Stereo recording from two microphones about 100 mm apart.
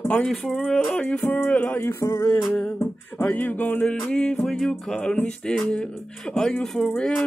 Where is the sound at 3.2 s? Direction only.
15° left (ahead or behind).